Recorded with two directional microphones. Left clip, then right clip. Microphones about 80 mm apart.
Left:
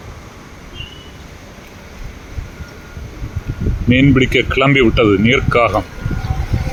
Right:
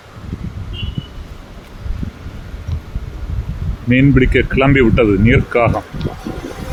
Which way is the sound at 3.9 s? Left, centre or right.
Centre.